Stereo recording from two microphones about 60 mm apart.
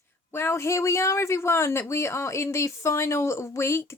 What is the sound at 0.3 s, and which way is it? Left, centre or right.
Speech, left.